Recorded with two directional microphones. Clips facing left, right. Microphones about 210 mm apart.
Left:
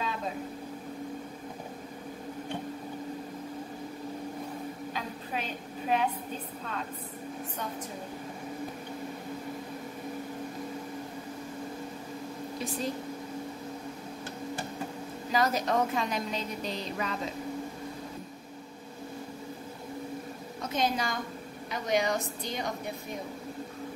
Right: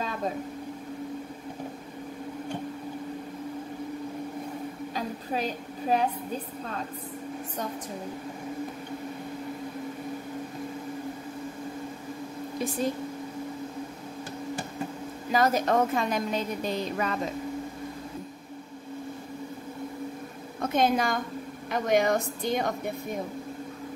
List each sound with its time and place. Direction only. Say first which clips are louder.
4.9 s a sound: right 7 dB; 40° right (ahead or behind)
15.3 s a woman's voice: right 4 dB; 50° right (ahead or behind)
20.6 s a woman's voice: right 6 dB; 55° right (ahead or behind)